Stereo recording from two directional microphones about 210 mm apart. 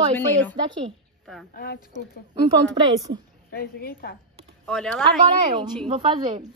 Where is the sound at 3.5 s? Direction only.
45° left (ahead or behind).